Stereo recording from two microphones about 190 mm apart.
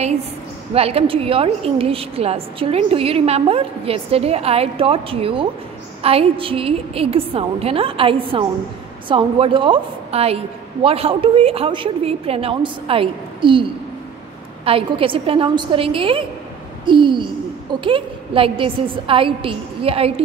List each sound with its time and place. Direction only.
0.7 s a woman's voice: 30° right (ahead or behind)